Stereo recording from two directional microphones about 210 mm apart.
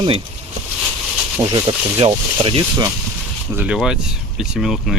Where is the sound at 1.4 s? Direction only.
20° right (ahead or behind).